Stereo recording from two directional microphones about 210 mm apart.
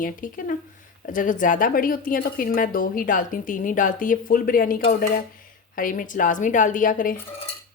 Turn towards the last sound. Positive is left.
turn(degrees=40)  # may be behind; listen again after turning